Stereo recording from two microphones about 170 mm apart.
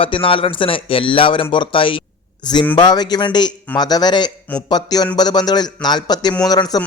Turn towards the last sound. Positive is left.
turn(degrees=20)  # may be behind; listen again after turning